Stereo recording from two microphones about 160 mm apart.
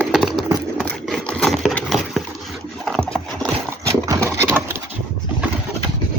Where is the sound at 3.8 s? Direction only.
20° right (ahead or behind).